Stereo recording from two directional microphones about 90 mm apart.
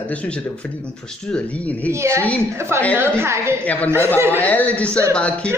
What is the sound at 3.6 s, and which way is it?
Speech, 15° left (ahead or behind).